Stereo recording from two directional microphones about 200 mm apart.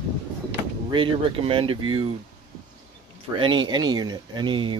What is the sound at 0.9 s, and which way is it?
Speech, 25° right (ahead or behind).